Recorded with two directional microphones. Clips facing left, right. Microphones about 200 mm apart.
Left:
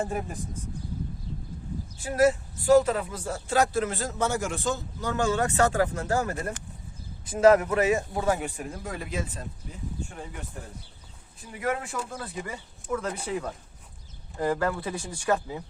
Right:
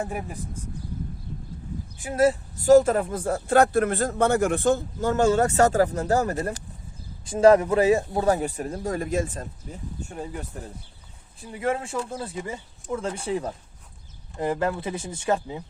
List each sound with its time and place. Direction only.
0.0 s speech: 10° right (ahead or behind)
2.0 s speech: 20° right (ahead or behind)
2.2 s speech: 40° right (ahead or behind)
11.3 s speech: 30° right (ahead or behind)